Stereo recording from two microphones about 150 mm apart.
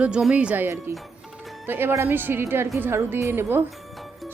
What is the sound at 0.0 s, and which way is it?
A woman's voice, 5° right (ahead or behind).